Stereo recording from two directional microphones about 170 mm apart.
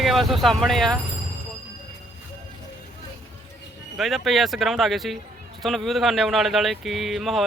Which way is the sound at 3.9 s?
Centre (ahead or behind).